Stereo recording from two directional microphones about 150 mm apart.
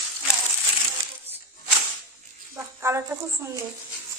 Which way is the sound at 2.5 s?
20° right (ahead or behind).